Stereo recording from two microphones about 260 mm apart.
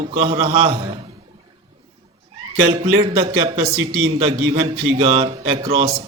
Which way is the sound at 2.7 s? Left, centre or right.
Right.